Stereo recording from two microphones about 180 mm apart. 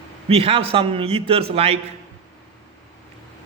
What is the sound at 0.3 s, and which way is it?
Speech, 30° right (ahead or behind).